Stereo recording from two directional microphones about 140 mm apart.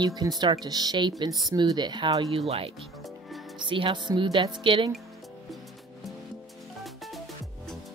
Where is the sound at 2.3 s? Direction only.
45° right (ahead or behind).